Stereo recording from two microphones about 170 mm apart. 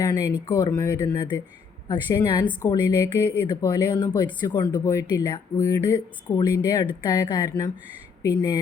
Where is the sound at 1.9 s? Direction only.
25° left (ahead or behind).